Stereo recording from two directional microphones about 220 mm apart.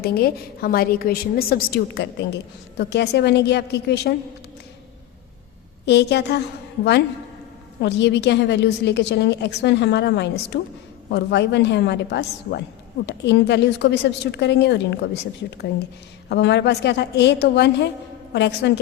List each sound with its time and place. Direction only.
0.0 s a woman's voice: 45° left (ahead or behind)
5.8 s a woman's voice: 50° left (ahead or behind)
7.8 s a woman's voice: 50° left (ahead or behind)